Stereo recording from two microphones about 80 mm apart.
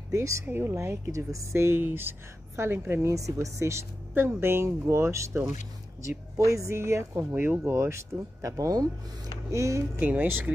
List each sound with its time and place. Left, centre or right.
0.1 s speech: right
0.5 s speech: right
7.3 s speech: right
7.7 s speech: right
9.9 s speech: right